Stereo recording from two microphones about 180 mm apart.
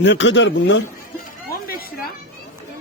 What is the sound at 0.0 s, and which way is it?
Speech, 85° left.